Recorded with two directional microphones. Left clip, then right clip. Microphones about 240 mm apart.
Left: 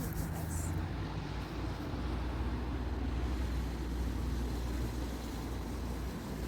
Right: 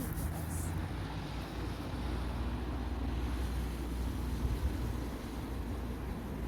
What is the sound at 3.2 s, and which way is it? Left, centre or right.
Vehicle, right.